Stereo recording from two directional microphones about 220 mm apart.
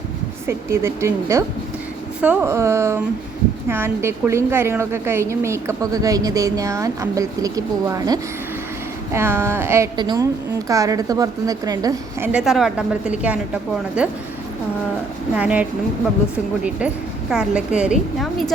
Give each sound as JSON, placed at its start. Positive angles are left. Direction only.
{"t": 0.4, "sound": "a woman's voice", "side_deg": -10}
{"t": 12.3, "sound": "a woman's voice", "side_deg": -5}
{"t": 15.4, "sound": "a woman's voice", "side_deg": -5}